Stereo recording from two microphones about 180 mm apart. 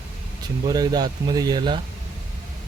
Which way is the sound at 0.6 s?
20° right (ahead or behind).